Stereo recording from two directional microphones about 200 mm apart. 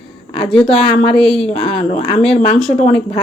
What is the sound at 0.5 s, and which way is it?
A woman's voice, 5° left (ahead or behind).